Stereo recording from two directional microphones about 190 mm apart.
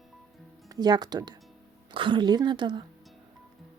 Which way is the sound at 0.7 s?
20° right (ahead or behind).